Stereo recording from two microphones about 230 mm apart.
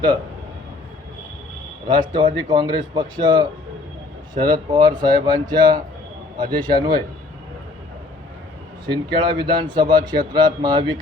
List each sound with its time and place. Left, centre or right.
1.9 s a man's voice: centre
9.1 s a man's voice: centre